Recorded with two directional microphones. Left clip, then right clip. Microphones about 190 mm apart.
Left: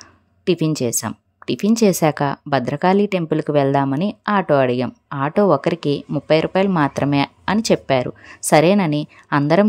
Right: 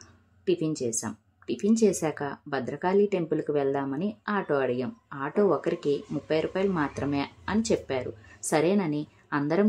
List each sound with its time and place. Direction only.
0.5 s speech: 50° left (ahead or behind)